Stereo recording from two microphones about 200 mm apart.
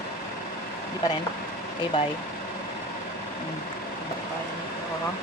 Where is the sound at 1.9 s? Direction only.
25° left (ahead or behind).